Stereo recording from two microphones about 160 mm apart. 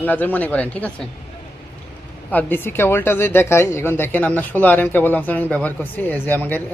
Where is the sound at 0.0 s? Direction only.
10° left (ahead or behind).